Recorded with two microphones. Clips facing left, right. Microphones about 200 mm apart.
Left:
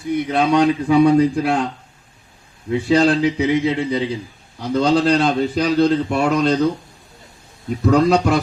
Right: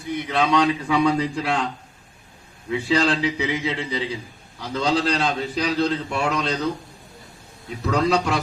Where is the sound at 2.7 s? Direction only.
50° left (ahead or behind).